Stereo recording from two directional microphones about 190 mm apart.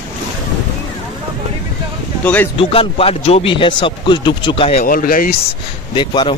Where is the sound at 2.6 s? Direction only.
30° left (ahead or behind).